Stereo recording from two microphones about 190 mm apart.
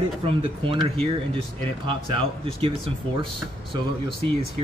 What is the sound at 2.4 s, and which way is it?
Speech, 30° right (ahead or behind).